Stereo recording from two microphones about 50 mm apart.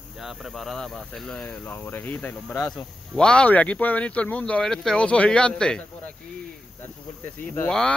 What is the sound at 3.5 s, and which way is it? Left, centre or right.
Speech, left.